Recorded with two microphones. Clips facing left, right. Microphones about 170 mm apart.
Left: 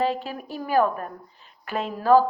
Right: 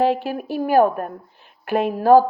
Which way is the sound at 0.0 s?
65° right (ahead or behind).